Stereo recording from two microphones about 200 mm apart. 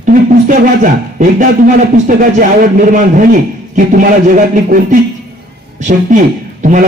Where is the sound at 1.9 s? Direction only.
40° right (ahead or behind).